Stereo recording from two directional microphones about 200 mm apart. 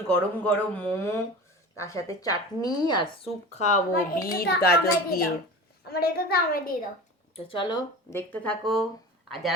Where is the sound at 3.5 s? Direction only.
40° left (ahead or behind).